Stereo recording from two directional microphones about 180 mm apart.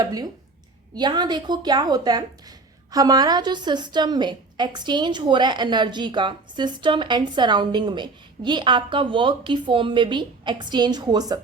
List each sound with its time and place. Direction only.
0.0 s a woman's voice: 20° right (ahead or behind)